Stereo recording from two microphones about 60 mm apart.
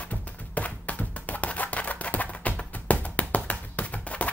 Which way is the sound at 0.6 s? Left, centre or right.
Left.